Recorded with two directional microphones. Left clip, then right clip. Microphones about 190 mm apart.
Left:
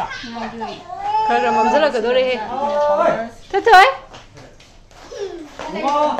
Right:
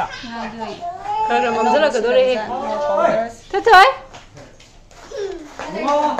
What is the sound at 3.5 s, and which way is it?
Speech, 5° left (ahead or behind).